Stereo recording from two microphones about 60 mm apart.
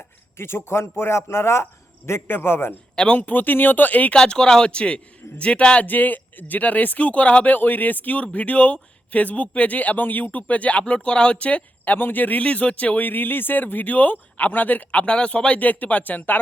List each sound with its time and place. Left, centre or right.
0.3 s a man's voice: left
2.9 s speech: centre
3.2 s speech: left
4.1 s speech: centre
11.9 s speech: left
15.0 s speech: centre